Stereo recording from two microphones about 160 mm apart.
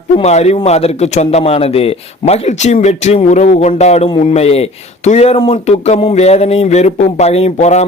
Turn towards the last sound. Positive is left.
turn(degrees=45)  # may be behind; listen again after turning